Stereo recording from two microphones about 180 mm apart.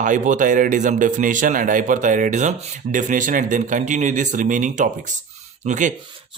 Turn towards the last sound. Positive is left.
turn(degrees=-45)  # may be behind; listen again after turning